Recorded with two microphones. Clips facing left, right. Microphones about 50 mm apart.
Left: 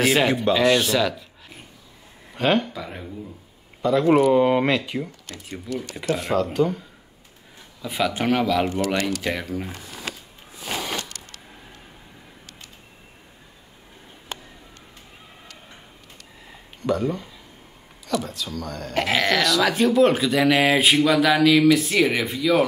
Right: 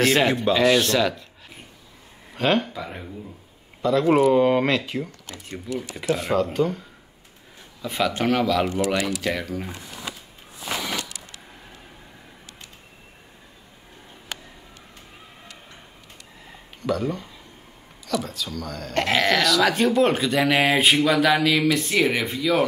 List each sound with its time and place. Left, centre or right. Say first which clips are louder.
0.0 s speech: even; centre
2.3 s speech: left 1 dB; centre
7.8 s speech: even; centre
8.7 s speech: even; centre
9.0 s speech: even; centre
10.1 s a sound: left 2 dB; left
11.1 s vehicle: even; centre
16.8 s speech: left 2 dB; centre